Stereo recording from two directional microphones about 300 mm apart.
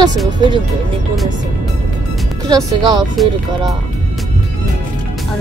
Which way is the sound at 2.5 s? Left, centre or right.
Centre.